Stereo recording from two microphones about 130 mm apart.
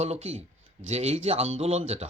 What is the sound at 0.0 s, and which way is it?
Speech, 55° right (ahead or behind).